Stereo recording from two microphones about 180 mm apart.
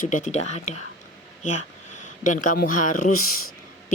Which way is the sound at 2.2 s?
45° left (ahead or behind).